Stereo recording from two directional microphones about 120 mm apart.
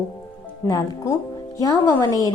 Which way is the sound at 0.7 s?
30° left (ahead or behind).